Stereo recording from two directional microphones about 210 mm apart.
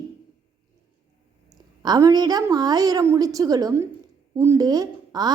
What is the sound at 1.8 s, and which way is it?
A woman's voice, 20° right (ahead or behind).